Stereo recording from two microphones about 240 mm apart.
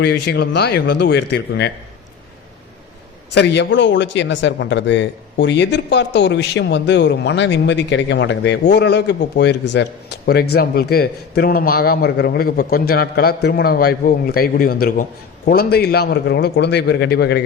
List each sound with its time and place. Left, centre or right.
0.0 s a man's voice: left
3.3 s a man's voice: left